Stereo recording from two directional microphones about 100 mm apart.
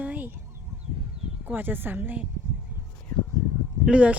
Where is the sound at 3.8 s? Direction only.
10° right (ahead or behind).